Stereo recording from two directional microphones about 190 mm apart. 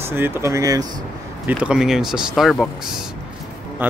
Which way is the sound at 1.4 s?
5° right (ahead or behind).